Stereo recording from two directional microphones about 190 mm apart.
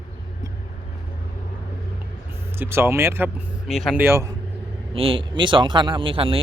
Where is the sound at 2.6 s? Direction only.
15° right (ahead or behind).